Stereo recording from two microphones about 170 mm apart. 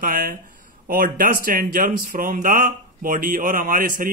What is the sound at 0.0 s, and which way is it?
Speech, 55° right (ahead or behind).